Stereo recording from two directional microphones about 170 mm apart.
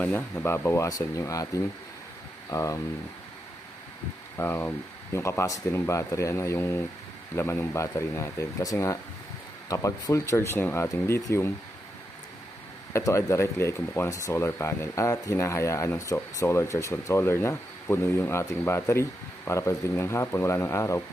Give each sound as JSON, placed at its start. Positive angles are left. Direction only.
{"t": 0.0, "sound": "speech", "side_deg": 10}
{"t": 4.4, "sound": "speech", "side_deg": 10}
{"t": 12.9, "sound": "speech", "side_deg": 15}